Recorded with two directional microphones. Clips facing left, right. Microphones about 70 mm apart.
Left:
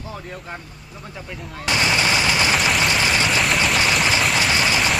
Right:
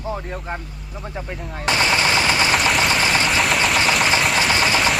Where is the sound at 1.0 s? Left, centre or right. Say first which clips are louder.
Right 4 dB; right.